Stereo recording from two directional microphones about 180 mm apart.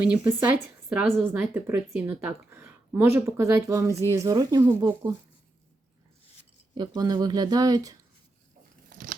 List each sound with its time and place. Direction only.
0.3 s a woman's voice: 10° right (ahead or behind)
6.7 s speech: 20° right (ahead or behind)
8.9 s crunch: 55° right (ahead or behind)